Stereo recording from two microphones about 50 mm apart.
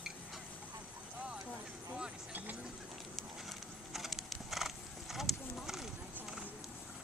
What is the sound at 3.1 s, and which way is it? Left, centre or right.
Horse, centre.